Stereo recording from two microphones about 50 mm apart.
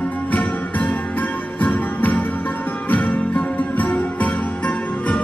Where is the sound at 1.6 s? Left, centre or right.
Left.